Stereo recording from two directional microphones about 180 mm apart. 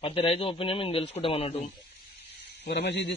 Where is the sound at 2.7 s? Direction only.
70° left (ahead or behind).